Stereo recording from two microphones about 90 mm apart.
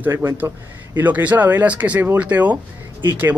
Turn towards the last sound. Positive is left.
turn(degrees=-20)  # may be behind; listen again after turning